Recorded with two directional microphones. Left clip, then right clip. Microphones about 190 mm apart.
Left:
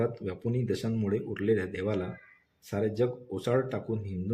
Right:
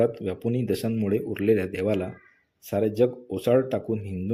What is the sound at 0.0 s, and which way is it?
Speech, 30° right (ahead or behind).